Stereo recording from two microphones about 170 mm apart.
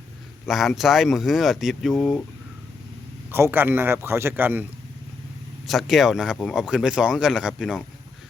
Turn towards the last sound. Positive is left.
turn(degrees=0)  # may be behind; listen again after turning